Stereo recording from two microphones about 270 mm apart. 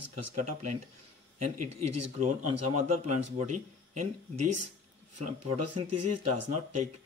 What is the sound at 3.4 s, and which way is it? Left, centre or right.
Speech, right.